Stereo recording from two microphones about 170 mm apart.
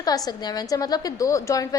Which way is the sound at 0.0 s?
25° left (ahead or behind).